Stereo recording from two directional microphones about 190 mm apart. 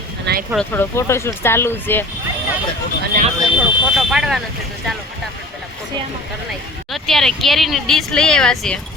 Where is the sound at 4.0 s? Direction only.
Centre (ahead or behind).